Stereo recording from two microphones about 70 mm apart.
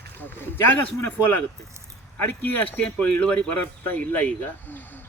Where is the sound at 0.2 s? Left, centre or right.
Left.